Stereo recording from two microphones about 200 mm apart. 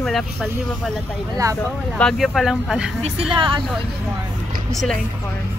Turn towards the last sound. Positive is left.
turn(degrees=5)  # may be behind; listen again after turning